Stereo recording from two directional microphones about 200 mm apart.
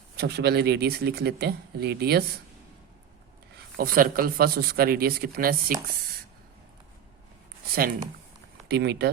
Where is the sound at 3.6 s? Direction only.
45° right (ahead or behind).